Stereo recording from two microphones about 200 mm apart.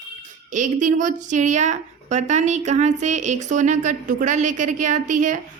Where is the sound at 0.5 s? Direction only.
40° right (ahead or behind).